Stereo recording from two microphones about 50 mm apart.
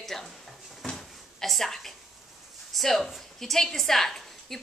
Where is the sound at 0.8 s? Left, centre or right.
Centre.